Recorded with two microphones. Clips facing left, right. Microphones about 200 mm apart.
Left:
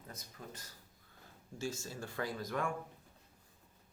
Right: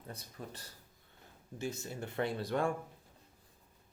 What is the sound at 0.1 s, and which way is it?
Speech, 35° right (ahead or behind).